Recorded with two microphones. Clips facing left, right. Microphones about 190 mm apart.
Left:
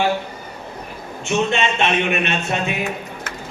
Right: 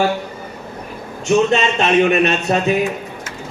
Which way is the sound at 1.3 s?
40° right (ahead or behind).